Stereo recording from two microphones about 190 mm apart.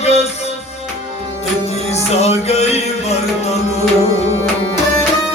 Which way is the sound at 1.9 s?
35° left (ahead or behind).